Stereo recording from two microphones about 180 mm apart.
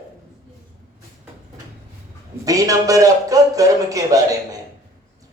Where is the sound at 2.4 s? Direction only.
20° right (ahead or behind).